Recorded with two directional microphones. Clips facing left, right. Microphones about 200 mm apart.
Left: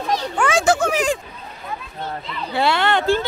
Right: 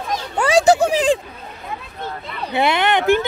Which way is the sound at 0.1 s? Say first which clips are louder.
Right 3 dB; 35° right (ahead or behind).